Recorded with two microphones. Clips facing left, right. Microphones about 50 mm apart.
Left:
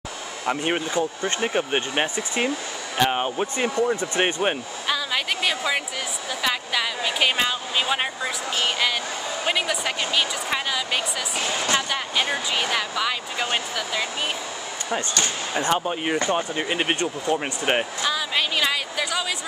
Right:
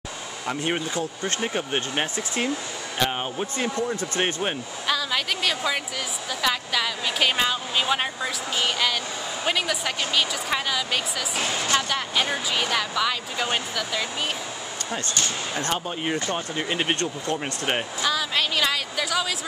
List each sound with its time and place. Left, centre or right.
0.5 s speech: centre
14.9 s speech: left